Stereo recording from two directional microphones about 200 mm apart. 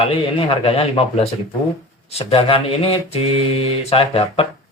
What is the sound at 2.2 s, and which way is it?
Mantra, 25° left (ahead or behind).